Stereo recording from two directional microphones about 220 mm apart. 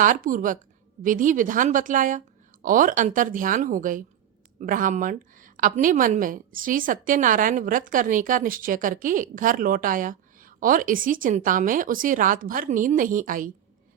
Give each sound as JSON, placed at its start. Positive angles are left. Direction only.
{"t": 0.0, "sound": "a woman's voice", "side_deg": -40}